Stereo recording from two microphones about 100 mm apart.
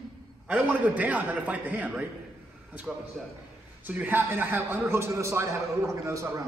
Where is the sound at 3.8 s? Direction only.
15° right (ahead or behind).